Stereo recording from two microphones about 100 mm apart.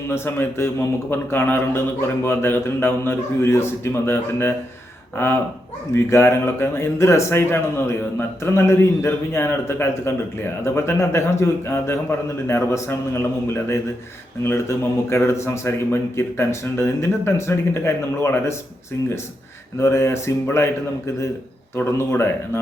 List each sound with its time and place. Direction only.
0.1 s speech: 25° left (ahead or behind)
19.8 s speech: 25° left (ahead or behind)
21.8 s speech: 25° left (ahead or behind)